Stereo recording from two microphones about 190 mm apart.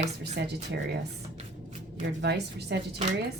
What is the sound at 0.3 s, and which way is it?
Speech, 60° right (ahead or behind).